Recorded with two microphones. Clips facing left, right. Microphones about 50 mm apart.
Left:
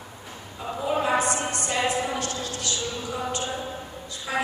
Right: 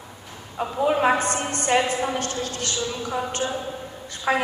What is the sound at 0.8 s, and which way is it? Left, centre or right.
A woman's voice, right.